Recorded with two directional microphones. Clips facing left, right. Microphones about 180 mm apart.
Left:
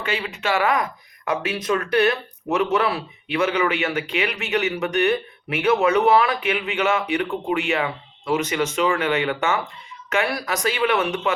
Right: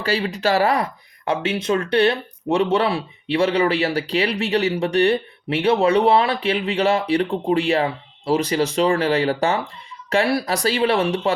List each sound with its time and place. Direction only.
0.0 s speech: 35° right (ahead or behind)